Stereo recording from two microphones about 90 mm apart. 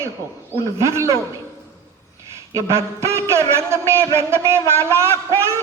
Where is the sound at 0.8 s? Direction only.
30° right (ahead or behind).